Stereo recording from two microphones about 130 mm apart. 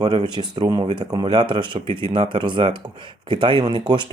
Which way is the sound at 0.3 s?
35° right (ahead or behind).